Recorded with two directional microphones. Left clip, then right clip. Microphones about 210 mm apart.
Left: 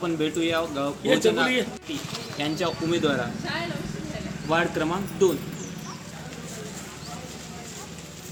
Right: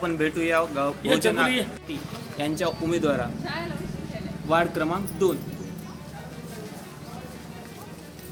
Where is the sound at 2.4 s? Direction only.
15° right (ahead or behind).